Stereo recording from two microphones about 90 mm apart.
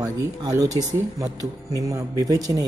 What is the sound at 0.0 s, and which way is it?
Speech, 45° right (ahead or behind).